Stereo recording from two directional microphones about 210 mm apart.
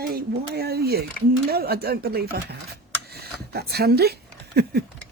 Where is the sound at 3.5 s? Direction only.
50° right (ahead or behind).